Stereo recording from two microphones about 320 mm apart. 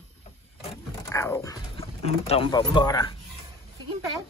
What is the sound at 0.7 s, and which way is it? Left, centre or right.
Speech, centre.